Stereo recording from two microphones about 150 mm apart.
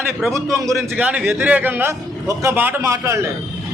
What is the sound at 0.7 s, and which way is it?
A man's voice, 5° right (ahead or behind).